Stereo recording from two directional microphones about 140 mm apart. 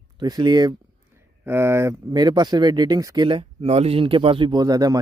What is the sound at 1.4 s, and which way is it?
Speech, 20° right (ahead or behind).